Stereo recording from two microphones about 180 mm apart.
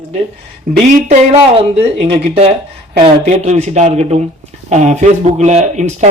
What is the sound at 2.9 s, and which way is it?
Speech, 35° right (ahead or behind).